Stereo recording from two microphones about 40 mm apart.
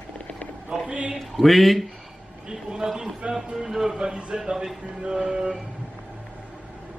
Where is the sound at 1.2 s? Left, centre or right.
Centre.